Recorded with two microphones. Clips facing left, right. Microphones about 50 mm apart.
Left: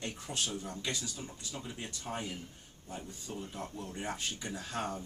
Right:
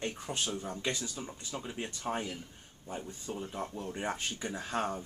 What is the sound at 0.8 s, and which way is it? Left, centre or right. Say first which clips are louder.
Speech: right 3 dB; centre.